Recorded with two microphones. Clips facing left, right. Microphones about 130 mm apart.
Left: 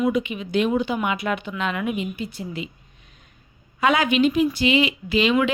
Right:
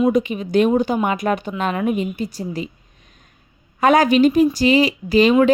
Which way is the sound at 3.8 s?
45° right (ahead or behind).